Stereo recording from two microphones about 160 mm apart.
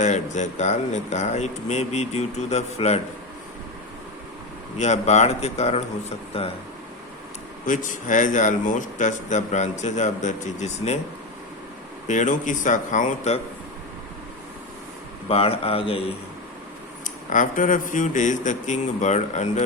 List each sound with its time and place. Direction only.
0.0 s speech: 50° left (ahead or behind)
4.8 s speech: 45° left (ahead or behind)
7.7 s speech: 55° left (ahead or behind)
12.0 s speech: 50° left (ahead or behind)
15.3 s speech: 35° left (ahead or behind)
17.0 s speech: 55° left (ahead or behind)